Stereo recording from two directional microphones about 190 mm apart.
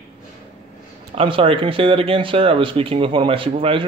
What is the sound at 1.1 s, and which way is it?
Speech, 30° right (ahead or behind).